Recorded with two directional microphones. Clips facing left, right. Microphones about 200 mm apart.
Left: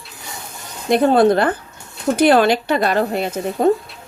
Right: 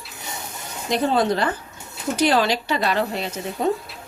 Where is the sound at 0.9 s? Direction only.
55° left (ahead or behind).